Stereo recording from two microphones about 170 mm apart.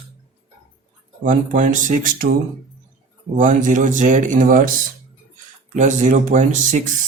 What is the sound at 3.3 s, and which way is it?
Speech, 50° right (ahead or behind).